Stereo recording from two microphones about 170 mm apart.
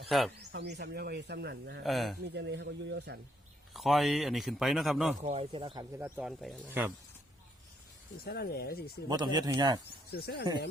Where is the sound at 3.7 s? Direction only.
Centre (ahead or behind).